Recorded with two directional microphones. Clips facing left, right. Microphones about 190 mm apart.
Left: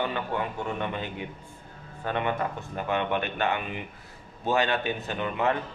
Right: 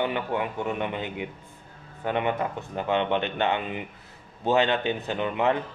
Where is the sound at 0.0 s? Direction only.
20° right (ahead or behind).